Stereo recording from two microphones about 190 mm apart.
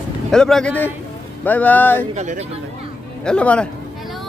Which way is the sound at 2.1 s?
40° right (ahead or behind).